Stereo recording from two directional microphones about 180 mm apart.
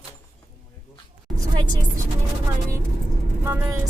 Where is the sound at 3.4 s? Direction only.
15° right (ahead or behind).